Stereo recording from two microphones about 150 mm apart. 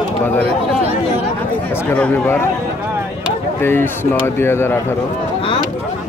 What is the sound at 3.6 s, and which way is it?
A man's voice, 15° left (ahead or behind).